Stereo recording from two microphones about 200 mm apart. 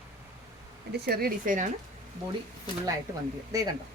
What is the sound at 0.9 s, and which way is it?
Speech, 50° right (ahead or behind).